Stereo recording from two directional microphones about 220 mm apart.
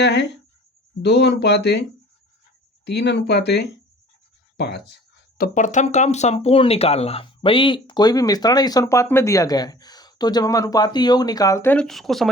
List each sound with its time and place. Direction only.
0.0 s speech: 50° left (ahead or behind)
2.8 s speech: 50° left (ahead or behind)
5.4 s speech: 35° left (ahead or behind); by 12.3 s centre (ahead or behind)